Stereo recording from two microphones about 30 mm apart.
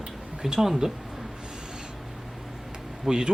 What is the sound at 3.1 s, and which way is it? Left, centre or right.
Speech, right.